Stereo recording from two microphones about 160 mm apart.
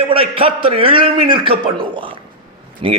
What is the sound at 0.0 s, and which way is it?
A man's voice, 35° right (ahead or behind).